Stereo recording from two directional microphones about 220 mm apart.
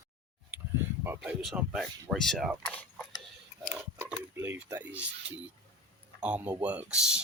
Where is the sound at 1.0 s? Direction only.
10° right (ahead or behind).